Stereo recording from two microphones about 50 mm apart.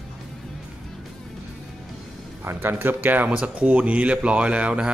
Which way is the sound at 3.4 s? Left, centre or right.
Right.